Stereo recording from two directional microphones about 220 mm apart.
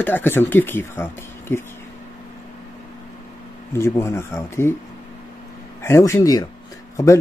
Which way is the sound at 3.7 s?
10° left (ahead or behind).